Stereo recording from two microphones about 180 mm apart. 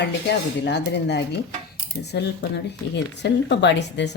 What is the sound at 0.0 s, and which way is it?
Speech, 70° left (ahead or behind).